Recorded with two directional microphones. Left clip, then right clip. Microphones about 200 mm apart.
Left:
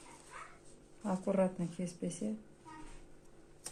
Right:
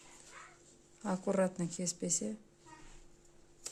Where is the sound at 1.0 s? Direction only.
35° right (ahead or behind).